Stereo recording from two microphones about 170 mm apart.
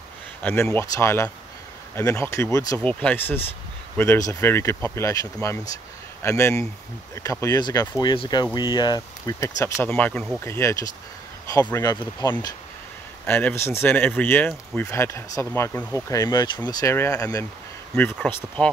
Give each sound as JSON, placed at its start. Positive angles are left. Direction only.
{"t": 0.4, "sound": "speech", "side_deg": 15}
{"t": 2.8, "sound": "speech", "side_deg": 5}
{"t": 9.8, "sound": "speech", "side_deg": 10}
{"t": 13.2, "sound": "speech", "side_deg": 10}
{"t": 18.1, "sound": "speech", "side_deg": 5}